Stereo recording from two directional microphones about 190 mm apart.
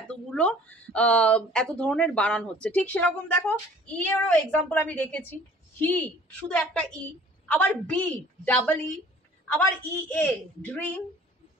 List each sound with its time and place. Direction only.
0.1 s speech: 5° left (ahead or behind)
10.0 s speech: 10° left (ahead or behind)